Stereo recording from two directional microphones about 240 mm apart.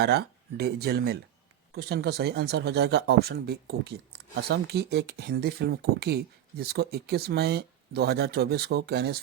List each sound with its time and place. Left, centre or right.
0.0 s speech: right